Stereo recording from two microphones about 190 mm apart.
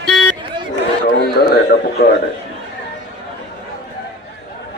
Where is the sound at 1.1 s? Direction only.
55° left (ahead or behind).